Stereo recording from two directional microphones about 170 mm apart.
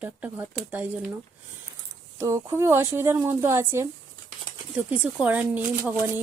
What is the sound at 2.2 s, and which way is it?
Speech, 15° right (ahead or behind).